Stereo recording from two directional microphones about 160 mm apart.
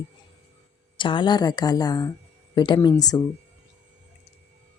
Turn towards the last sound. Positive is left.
turn(degrees=20)  # may be behind; listen again after turning